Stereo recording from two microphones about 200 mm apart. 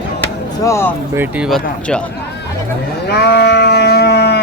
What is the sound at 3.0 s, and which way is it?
Sheep, 55° left (ahead or behind).